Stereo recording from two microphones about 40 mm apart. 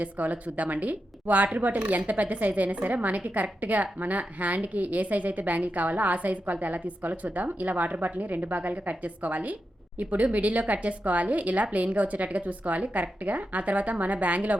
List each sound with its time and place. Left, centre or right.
0.0 s a woman's voice: right